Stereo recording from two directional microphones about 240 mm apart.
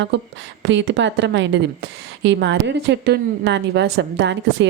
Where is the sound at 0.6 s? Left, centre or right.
Right.